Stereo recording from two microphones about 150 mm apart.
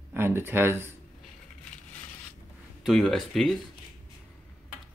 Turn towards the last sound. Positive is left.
turn(degrees=0)  # may be behind; listen again after turning